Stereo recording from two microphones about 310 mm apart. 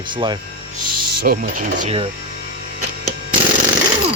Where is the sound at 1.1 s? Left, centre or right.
Right.